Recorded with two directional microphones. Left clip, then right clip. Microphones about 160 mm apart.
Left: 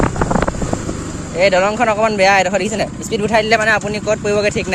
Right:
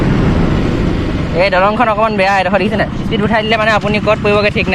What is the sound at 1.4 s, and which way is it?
Speech, 40° left (ahead or behind).